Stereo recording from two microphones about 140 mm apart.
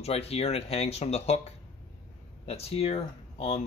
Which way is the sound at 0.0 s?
45° left (ahead or behind).